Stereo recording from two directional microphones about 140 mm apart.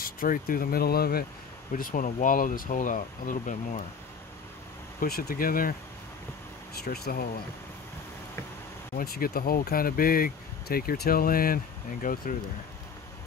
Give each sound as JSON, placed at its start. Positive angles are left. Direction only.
{"t": 0.0, "sound": "speech", "side_deg": 90}
{"t": 5.0, "sound": "speech", "side_deg": 90}
{"t": 6.9, "sound": "speech", "side_deg": 85}
{"t": 8.9, "sound": "speech", "side_deg": 90}